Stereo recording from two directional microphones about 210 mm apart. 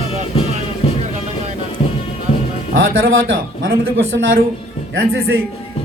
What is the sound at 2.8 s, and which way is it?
Speech, 70° right (ahead or behind).